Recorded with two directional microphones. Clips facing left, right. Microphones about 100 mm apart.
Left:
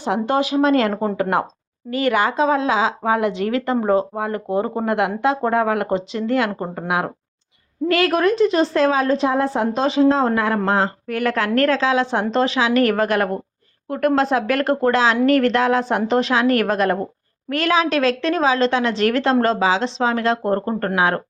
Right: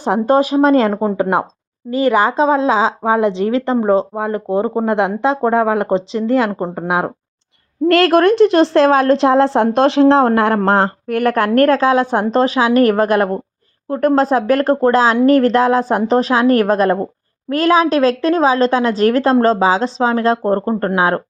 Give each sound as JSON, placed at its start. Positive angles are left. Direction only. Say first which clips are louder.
{"t": 0.0, "sound": "a woman's voice", "louder": "right 6 dB", "side_deg": -40}
{"t": 7.9, "sound": "a woman's voice", "louder": "right 6 dB", "side_deg": -80}